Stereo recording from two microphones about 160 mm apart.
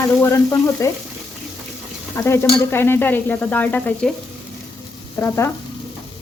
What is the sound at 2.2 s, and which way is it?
Stir, 20° left (ahead or behind).